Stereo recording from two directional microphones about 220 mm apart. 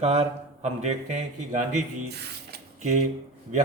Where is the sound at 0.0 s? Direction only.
30° right (ahead or behind).